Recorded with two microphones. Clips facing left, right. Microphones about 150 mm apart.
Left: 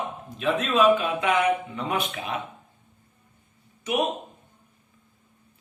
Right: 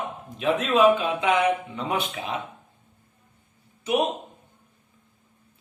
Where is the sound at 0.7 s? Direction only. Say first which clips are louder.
Right 1 dB; 25° right (ahead or behind).